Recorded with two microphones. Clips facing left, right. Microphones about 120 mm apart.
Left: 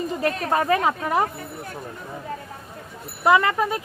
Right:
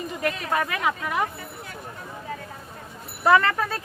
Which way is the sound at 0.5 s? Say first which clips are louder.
Left 6 dB; 35° left (ahead or behind).